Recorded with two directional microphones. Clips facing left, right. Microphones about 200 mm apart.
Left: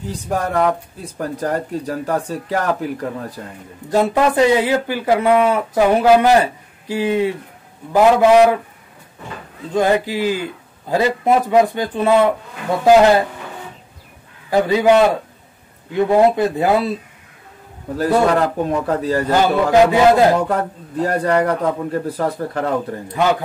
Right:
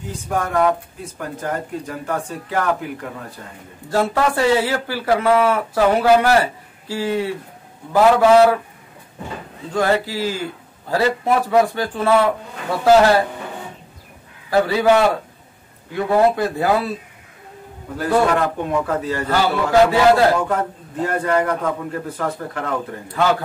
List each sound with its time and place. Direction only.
0.1 s speech: 35° left (ahead or behind)
3.9 s speech: 15° left (ahead or behind)
9.8 s a man's voice: 15° left (ahead or behind)
14.5 s a man's voice: 15° left (ahead or behind)
17.9 s speech: 35° left (ahead or behind)
19.2 s a man's voice: 20° left (ahead or behind)
20.4 s speech: 35° left (ahead or behind)